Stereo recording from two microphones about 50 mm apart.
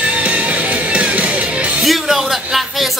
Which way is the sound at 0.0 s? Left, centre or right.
Right.